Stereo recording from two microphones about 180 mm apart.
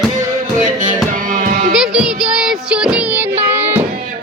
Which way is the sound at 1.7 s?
5° right (ahead or behind).